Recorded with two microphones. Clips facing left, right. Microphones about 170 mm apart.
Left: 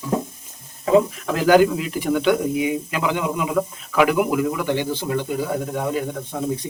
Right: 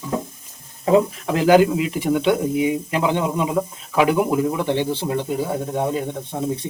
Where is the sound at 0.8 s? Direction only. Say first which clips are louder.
Even; 25° right (ahead or behind).